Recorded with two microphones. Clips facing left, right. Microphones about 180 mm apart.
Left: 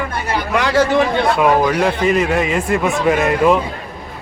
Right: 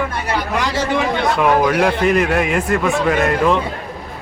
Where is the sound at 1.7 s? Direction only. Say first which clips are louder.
Even; 5° right (ahead or behind).